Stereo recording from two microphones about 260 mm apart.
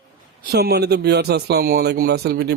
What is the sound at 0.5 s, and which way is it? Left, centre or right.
Speech, right.